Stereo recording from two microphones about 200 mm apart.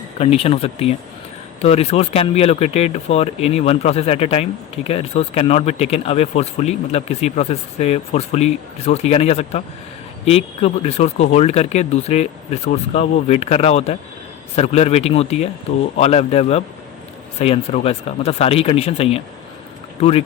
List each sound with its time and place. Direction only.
0.2 s speech: 30° left (ahead or behind)